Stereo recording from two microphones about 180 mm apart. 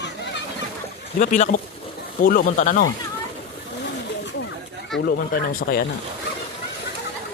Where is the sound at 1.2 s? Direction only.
45° left (ahead or behind).